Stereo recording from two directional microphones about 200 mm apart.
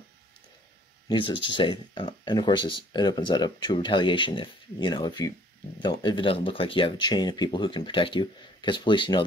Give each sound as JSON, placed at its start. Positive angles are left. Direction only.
{"t": 1.0, "sound": "speech", "side_deg": 25}